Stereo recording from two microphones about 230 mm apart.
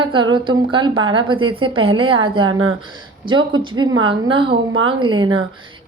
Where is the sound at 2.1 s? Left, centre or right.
Right.